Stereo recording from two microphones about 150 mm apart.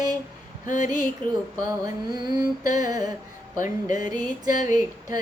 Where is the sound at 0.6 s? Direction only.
60° left (ahead or behind).